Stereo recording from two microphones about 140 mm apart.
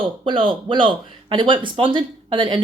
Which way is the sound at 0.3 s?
35° right (ahead or behind).